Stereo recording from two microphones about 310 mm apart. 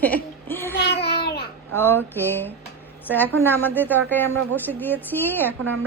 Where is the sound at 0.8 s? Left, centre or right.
Left.